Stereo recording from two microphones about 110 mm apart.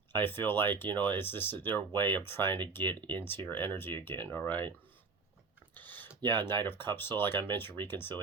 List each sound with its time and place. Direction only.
0.1 s speech: 20° left (ahead or behind)
5.7 s speech: 15° left (ahead or behind)